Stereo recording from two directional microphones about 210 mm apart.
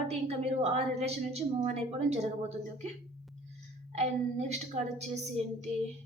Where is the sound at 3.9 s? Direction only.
30° right (ahead or behind).